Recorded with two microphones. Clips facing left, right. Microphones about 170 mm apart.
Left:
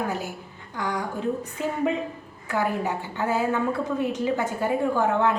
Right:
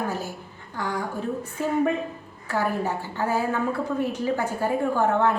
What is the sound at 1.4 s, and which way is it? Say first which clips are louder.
A woman's voice: right 3 dB; 15° left (ahead or behind).